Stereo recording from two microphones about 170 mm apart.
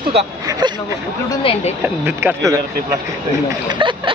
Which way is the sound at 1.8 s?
10° right (ahead or behind).